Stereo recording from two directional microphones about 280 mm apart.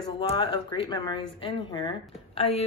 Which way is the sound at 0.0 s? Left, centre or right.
Centre.